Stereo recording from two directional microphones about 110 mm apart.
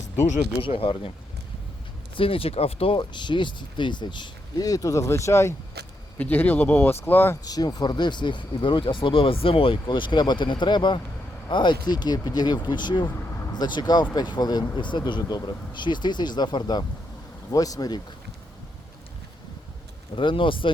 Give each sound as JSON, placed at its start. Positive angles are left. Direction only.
{"t": 0.6, "sound": "speech", "side_deg": 55}
{"t": 2.1, "sound": "speech", "side_deg": 55}
{"t": 7.4, "sound": "speech", "side_deg": 35}
{"t": 13.1, "sound": "vehicle", "side_deg": 20}
{"t": 13.5, "sound": "speech", "side_deg": 40}
{"t": 20.1, "sound": "speech", "side_deg": 50}